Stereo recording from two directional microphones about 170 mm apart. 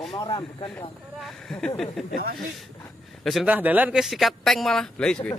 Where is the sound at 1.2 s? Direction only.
5° left (ahead or behind).